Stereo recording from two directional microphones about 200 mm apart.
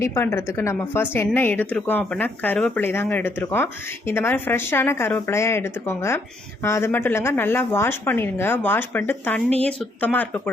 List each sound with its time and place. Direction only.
0.0 s a woman's voice: 15° left (ahead or behind)